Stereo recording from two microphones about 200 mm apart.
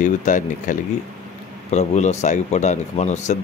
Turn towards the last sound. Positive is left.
turn(degrees=35)  # may be behind; listen again after turning